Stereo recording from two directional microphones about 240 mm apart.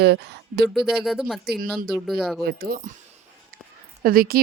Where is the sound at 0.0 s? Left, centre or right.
Right.